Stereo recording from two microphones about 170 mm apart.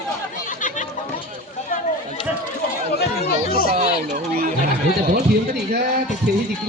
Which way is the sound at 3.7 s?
45° right (ahead or behind).